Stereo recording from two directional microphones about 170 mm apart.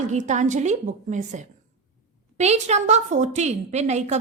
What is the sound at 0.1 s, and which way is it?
A woman's voice, 45° right (ahead or behind).